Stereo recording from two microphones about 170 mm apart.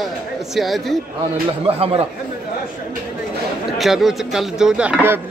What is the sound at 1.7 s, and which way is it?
Speech, 35° right (ahead or behind).